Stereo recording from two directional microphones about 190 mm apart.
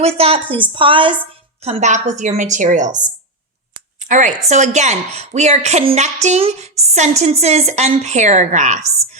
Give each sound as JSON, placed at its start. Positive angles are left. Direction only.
{"t": 0.2, "sound": "a woman's voice", "side_deg": -30}
{"t": 4.1, "sound": "a woman's voice", "side_deg": -40}